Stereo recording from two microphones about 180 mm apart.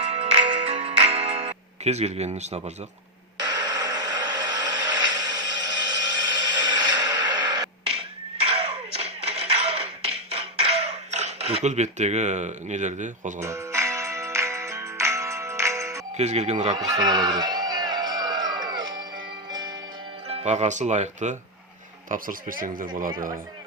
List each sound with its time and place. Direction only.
0.0 s music: 35° right (ahead or behind)
3.4 s a sound: 20° right (ahead or behind); by 13.3 s 40° right (ahead or behind)
13.4 s music: 15° right (ahead or behind)
16.1 s speech: 40° right (ahead or behind)
16.6 s a sound: 20° right (ahead or behind)
19.5 s music: 25° right (ahead or behind)
20.2 s speech: 35° right (ahead or behind)